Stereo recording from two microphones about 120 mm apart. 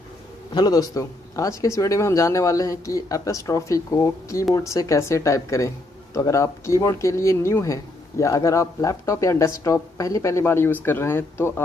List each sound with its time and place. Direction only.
0.6 s speech: 30° left (ahead or behind)